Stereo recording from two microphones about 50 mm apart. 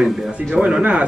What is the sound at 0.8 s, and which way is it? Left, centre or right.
Speech, right.